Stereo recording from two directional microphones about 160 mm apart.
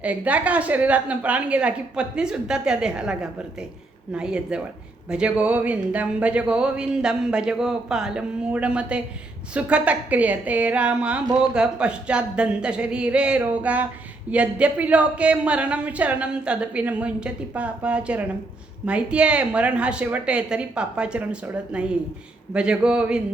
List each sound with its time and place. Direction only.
0.0 s a woman's voice: 10° right (ahead or behind)